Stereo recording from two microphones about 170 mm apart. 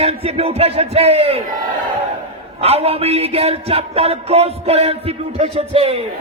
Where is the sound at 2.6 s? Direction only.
35° right (ahead or behind).